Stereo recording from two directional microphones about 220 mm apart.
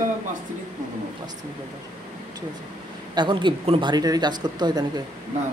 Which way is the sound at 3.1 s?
20° right (ahead or behind).